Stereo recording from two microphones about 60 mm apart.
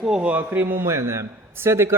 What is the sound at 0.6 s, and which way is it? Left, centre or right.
A man's voice, right.